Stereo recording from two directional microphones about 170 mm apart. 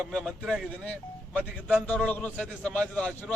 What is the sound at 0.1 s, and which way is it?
A man's voice, 5° left (ahead or behind).